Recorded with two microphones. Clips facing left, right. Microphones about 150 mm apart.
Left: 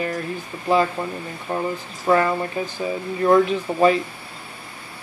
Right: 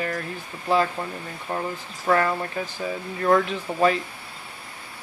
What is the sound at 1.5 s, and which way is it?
Speech, 15° left (ahead or behind).